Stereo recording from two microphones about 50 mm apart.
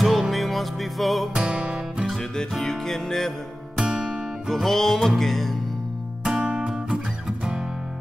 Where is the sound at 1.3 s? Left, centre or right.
Centre.